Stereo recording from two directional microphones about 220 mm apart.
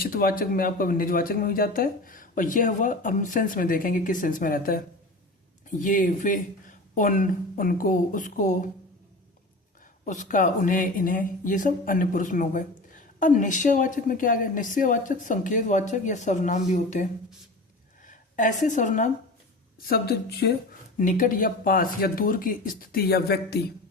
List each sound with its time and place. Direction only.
0.0 s speech: 40° left (ahead or behind)
5.8 s speech: 35° left (ahead or behind)
10.1 s a woman's voice: 35° left (ahead or behind)